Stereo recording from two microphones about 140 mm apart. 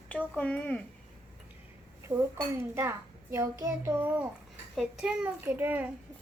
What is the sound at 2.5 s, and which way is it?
A child's voice, 20° right (ahead or behind).